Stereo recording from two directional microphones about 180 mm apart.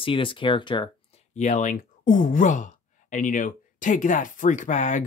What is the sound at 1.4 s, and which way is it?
Speech, 40° left (ahead or behind).